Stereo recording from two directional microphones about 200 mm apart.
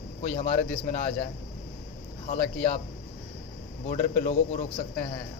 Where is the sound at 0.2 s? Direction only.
30° left (ahead or behind).